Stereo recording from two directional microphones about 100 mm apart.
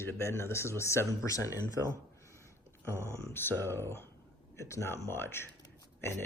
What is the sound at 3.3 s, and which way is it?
Speech, 20° left (ahead or behind).